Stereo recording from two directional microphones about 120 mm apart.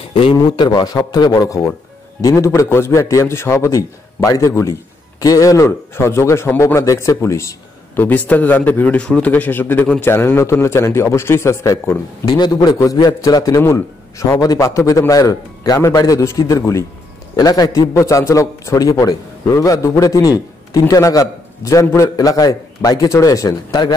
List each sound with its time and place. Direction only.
0.2 s a man's voice: 40° left (ahead or behind)